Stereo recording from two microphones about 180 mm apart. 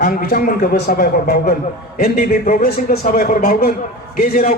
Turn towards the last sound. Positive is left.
turn(degrees=55)  # may be behind; listen again after turning